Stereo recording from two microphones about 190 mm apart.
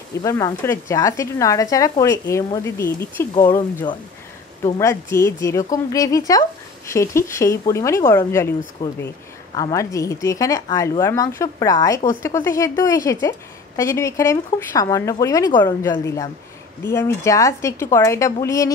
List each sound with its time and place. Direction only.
0.2 s speech: 15° left (ahead or behind)